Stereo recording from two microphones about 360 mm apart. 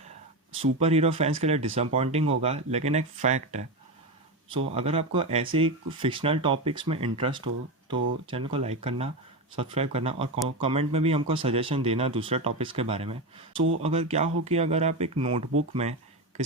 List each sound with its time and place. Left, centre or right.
0.5 s speech: centre